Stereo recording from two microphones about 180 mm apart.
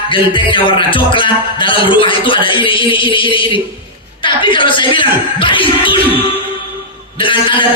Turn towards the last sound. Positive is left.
turn(degrees=30)  # may be behind; listen again after turning